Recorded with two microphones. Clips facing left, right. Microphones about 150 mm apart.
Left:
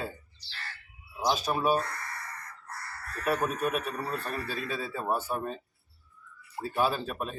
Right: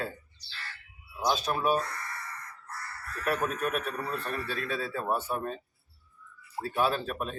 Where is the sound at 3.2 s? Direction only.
Centre (ahead or behind).